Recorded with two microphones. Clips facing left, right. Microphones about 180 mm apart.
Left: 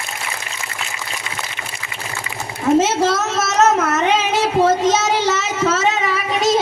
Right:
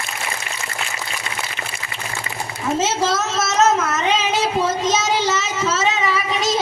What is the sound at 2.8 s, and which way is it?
Child singing, 60° left (ahead or behind).